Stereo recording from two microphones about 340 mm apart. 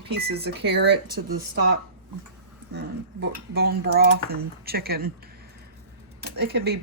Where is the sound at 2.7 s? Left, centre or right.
Right.